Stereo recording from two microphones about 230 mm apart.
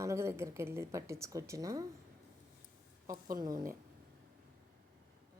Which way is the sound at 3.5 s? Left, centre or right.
Centre.